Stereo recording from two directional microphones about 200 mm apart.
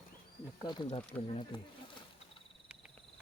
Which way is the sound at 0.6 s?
25° left (ahead or behind).